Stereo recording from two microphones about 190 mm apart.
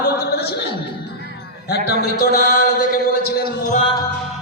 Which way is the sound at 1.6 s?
55° left (ahead or behind).